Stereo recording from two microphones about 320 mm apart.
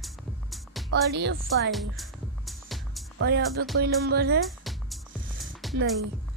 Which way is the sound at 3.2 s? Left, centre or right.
Right.